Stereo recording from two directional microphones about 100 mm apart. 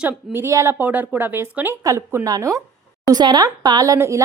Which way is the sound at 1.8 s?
35° right (ahead or behind).